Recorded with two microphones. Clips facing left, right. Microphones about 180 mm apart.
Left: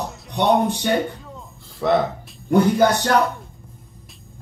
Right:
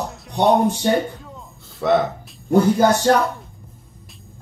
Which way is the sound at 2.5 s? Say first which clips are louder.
Right 1 dB; 65° left (ahead or behind).